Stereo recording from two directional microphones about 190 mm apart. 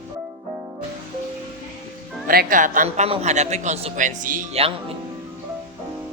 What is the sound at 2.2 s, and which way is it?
Speech, 50° right (ahead or behind).